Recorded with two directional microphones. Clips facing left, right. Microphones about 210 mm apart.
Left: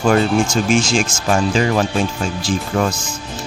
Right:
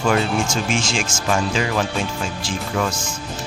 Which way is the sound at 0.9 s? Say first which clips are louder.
Left 4 dB; 40° left (ahead or behind).